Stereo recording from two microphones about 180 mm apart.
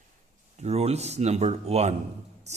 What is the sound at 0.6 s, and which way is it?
Speech, 35° right (ahead or behind).